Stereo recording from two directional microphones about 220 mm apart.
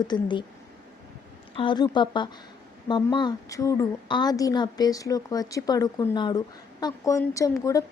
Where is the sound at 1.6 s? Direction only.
20° left (ahead or behind).